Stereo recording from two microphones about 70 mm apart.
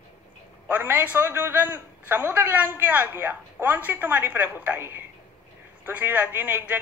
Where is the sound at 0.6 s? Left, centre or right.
Right.